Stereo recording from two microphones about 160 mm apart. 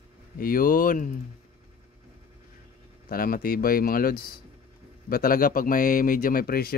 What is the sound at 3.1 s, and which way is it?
Speech, 65° left (ahead or behind).